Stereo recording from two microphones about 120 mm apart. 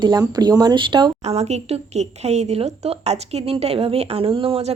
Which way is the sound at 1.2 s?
65° right (ahead or behind).